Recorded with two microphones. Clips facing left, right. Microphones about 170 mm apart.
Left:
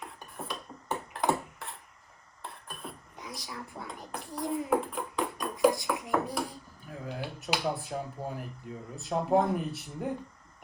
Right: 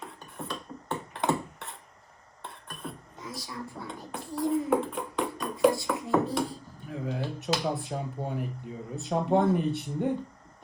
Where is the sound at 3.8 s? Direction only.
20° left (ahead or behind).